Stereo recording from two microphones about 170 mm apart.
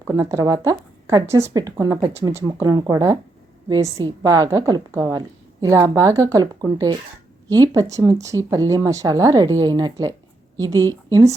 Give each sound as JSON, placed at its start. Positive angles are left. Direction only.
{"t": 0.1, "sound": "speech", "side_deg": -15}